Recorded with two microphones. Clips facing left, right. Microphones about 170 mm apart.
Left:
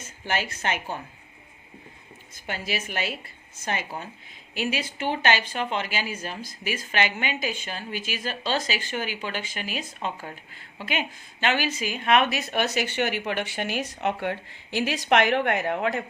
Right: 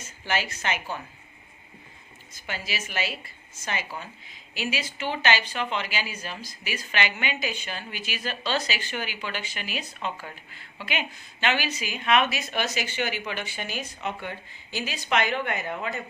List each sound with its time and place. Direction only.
0.0 s a woman's voice: 50° left (ahead or behind)
2.3 s speech: 50° left (ahead or behind); by 16.0 s 70° left (ahead or behind)